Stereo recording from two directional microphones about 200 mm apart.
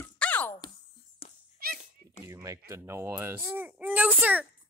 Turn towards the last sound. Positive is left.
turn(degrees=-5)  # may be behind; listen again after turning